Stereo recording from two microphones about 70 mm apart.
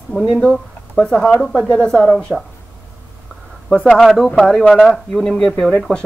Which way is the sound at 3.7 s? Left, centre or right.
Centre.